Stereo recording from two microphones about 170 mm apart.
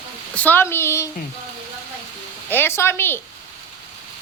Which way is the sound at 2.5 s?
15° left (ahead or behind).